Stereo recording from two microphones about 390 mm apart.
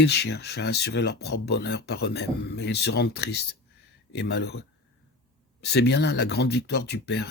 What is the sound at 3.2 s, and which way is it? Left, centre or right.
Speech, left.